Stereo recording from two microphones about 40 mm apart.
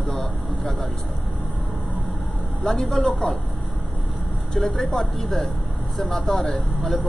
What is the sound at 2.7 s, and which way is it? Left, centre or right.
Speech, centre.